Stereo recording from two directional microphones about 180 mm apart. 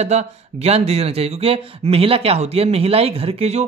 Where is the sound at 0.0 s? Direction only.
40° right (ahead or behind).